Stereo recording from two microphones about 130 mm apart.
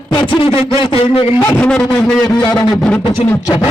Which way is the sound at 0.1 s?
40° left (ahead or behind).